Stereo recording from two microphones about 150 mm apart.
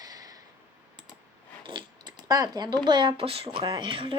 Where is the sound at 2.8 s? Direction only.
30° right (ahead or behind).